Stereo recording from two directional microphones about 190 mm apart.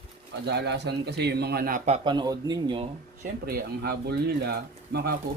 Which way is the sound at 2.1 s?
20° right (ahead or behind).